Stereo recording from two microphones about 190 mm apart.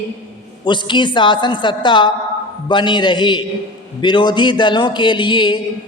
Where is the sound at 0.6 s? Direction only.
25° left (ahead or behind).